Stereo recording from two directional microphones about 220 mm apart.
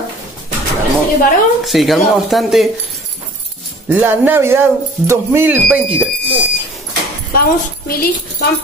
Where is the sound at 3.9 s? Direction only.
10° right (ahead or behind).